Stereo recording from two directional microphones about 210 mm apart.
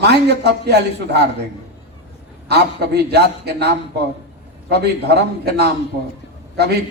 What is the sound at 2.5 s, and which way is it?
A man's voice, 50° right (ahead or behind).